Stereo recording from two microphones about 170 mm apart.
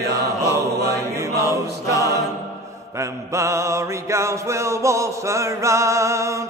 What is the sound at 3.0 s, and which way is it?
Mantra, 15° right (ahead or behind).